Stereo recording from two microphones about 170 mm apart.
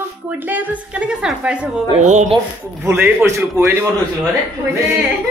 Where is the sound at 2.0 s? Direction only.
45° right (ahead or behind).